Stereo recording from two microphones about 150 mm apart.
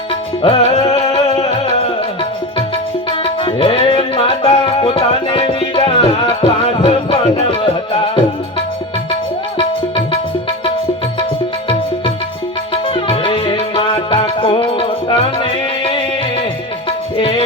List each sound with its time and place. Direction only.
0.4 s music: 35° left (ahead or behind)
1.0 s music: 30° left (ahead or behind)
3.1 s music: 35° left (ahead or behind)
12.7 s music: 35° left (ahead or behind)
17.2 s music: 35° left (ahead or behind)